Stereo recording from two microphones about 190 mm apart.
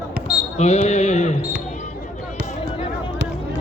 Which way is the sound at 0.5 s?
35° left (ahead or behind).